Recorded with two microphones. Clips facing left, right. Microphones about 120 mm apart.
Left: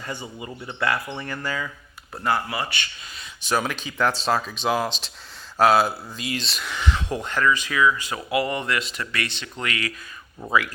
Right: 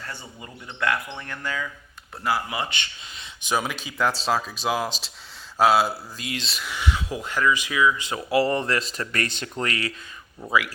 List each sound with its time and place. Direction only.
0.0 s speech: 15° left (ahead or behind)
2.5 s speech: 20° right (ahead or behind)
10.4 s speech: 20° left (ahead or behind)